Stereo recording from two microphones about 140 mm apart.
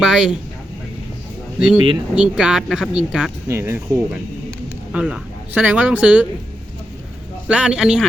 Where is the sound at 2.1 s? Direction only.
5° right (ahead or behind).